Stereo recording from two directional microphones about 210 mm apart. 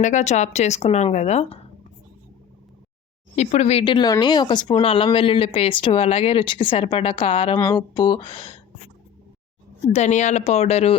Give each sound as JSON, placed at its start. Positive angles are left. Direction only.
{"t": 0.0, "sound": "speech", "side_deg": 35}
{"t": 3.3, "sound": "speech", "side_deg": 30}
{"t": 9.9, "sound": "speech", "side_deg": 35}